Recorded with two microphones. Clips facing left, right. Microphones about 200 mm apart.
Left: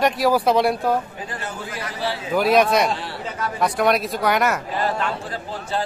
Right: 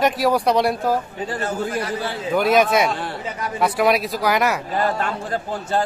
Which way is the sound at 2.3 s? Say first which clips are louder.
Even; centre (ahead or behind).